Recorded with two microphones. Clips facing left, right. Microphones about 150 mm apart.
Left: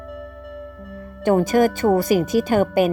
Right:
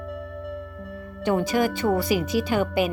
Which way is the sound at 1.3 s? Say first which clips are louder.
Left 6 dB; 45° left (ahead or behind).